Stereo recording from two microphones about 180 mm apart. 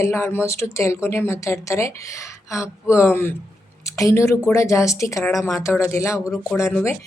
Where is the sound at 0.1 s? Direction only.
15° left (ahead or behind).